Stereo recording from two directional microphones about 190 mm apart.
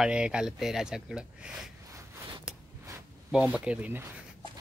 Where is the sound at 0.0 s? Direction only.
5° right (ahead or behind).